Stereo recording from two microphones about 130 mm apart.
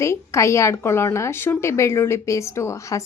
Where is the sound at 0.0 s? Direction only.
20° left (ahead or behind).